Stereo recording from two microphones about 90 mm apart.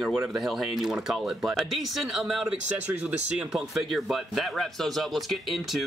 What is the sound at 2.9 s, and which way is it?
Speech, 20° right (ahead or behind).